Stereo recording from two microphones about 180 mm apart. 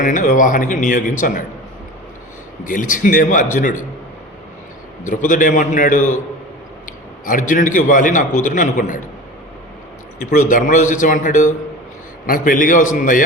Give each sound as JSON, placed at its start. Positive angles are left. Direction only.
{"t": 0.0, "sound": "a man's voice", "side_deg": 45}
{"t": 2.6, "sound": "a man's voice", "side_deg": 45}
{"t": 5.0, "sound": "a man's voice", "side_deg": 45}
{"t": 7.3, "sound": "a man's voice", "side_deg": 45}
{"t": 10.2, "sound": "a man's voice", "side_deg": 45}